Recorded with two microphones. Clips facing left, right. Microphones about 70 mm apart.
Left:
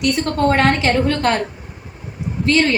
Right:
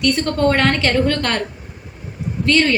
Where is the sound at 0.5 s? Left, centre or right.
Centre.